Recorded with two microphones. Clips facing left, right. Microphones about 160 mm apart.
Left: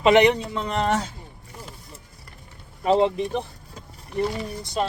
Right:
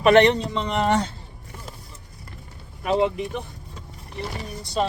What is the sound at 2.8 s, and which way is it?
Speech, 30° left (ahead or behind).